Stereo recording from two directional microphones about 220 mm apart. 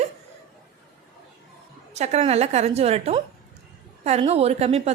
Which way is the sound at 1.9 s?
30° right (ahead or behind).